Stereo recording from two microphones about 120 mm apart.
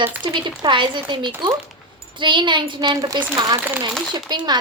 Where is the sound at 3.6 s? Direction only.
15° right (ahead or behind).